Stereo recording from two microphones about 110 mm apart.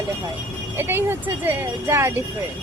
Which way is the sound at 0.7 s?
20° right (ahead or behind).